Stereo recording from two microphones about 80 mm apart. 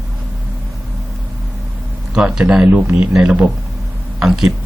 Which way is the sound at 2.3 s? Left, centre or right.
Centre.